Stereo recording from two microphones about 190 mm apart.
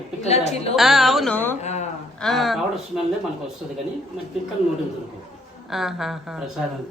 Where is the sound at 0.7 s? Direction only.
Centre (ahead or behind).